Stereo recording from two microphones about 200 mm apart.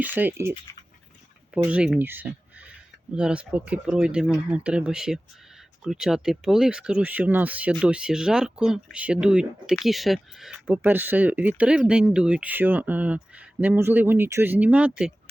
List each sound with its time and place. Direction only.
0.0 s speech: 10° right (ahead or behind)
1.5 s speech: 5° right (ahead or behind)